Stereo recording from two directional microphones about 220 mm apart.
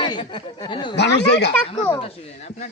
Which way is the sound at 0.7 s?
20° left (ahead or behind).